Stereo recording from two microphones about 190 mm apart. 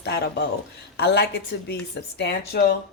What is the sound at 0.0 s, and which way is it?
A woman's voice, 60° left (ahead or behind).